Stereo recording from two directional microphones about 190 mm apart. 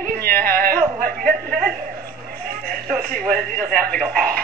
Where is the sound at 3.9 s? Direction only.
Centre (ahead or behind).